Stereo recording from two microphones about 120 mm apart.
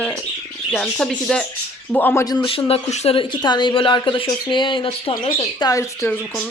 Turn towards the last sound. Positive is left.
turn(degrees=25)  # may be behind; listen again after turning